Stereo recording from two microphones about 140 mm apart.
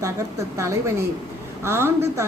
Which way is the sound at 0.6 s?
20° right (ahead or behind).